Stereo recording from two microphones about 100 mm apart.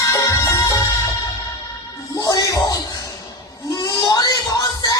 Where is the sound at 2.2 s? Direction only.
35° left (ahead or behind).